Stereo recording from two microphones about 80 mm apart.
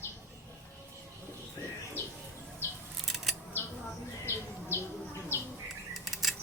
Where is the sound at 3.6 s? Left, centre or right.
Left.